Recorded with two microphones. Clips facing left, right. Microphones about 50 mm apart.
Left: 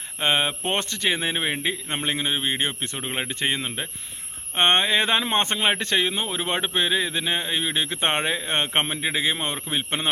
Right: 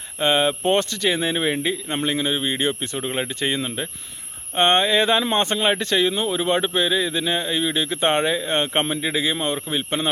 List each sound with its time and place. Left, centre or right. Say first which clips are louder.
0.2 s speech: right 4 dB; left
9.6 s a man's voice: right 2 dB; centre